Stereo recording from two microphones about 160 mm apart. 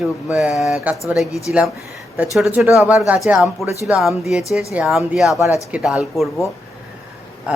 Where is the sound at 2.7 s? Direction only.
5° right (ahead or behind).